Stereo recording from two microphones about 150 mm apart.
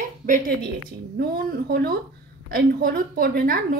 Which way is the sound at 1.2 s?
85° right.